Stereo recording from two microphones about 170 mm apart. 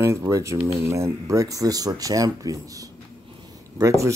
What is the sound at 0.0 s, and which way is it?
Speech, 15° right (ahead or behind).